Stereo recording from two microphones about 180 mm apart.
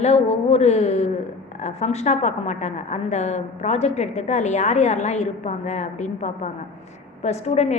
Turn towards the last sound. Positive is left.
turn(degrees=35)  # may be behind; listen again after turning